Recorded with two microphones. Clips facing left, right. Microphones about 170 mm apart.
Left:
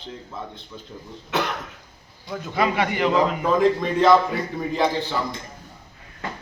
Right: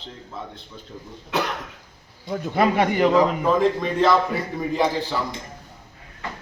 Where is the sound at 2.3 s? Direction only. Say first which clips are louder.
Right 3 dB; 45° right (ahead or behind).